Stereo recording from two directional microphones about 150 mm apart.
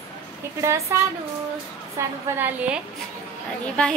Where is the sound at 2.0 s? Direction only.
15° right (ahead or behind).